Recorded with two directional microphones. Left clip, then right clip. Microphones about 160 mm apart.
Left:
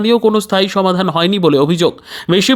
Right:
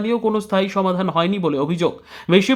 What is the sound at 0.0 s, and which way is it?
Speech, 40° left (ahead or behind).